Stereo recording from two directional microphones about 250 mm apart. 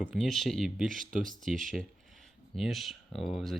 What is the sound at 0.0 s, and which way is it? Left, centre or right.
Speech, centre.